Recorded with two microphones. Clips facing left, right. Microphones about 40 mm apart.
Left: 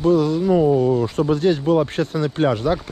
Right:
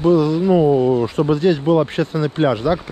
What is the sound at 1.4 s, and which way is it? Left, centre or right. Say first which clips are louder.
Speech: right 2 dB; right.